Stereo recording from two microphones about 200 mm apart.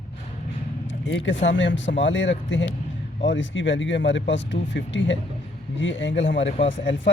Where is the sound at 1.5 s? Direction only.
65° left (ahead or behind).